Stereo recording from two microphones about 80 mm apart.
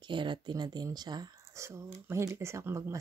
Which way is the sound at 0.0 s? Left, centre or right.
Right.